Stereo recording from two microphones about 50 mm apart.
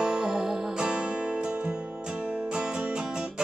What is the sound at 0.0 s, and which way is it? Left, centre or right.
Music, centre.